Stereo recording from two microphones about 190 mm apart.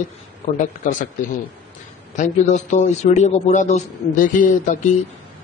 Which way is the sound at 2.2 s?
40° left (ahead or behind).